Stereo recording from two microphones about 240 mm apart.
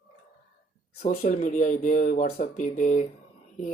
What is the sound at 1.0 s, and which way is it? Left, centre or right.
Speech, left.